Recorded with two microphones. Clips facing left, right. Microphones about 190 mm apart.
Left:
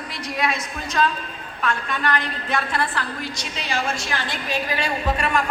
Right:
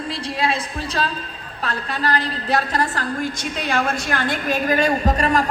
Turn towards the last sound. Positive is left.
turn(degrees=-40)  # may be behind; listen again after turning